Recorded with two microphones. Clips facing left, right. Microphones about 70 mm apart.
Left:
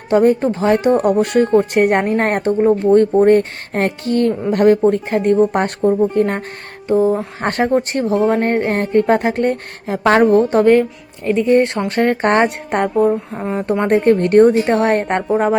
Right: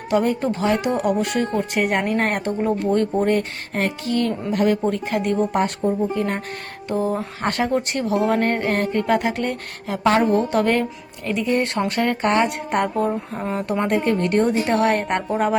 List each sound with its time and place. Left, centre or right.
0.1 s speech: left
2.0 s speech: left
5.0 s speech: left
5.5 s speech: left
6.8 s a sound: centre
7.4 s speech: left
8.4 s speech: centre
10.0 s speech: left
10.3 s speech: left
10.7 s a woman's voice: centre; by 12.5 s left
13.0 s a sound: centre
13.8 s speech: left
14.7 s a woman's voice: left